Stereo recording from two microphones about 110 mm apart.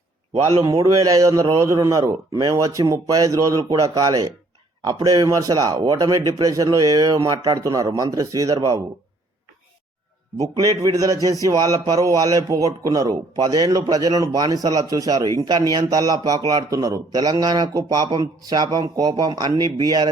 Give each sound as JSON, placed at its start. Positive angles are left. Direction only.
{"t": 0.9, "sound": "a man's voice", "side_deg": -30}
{"t": 10.6, "sound": "a man's voice", "side_deg": -30}